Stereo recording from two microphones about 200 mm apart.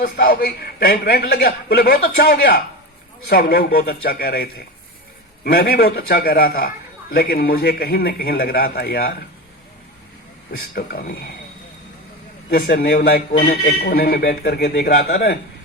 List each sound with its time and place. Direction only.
0.0 s a man's voice: 50° left (ahead or behind)
10.8 s a man's voice: 50° left (ahead or behind)
12.5 s a man's voice: 45° left (ahead or behind)